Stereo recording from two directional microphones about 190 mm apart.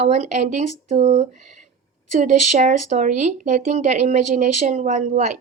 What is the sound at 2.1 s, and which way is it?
Speech, 40° right (ahead or behind).